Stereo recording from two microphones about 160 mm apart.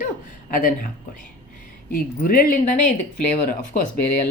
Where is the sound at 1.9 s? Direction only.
60° left (ahead or behind).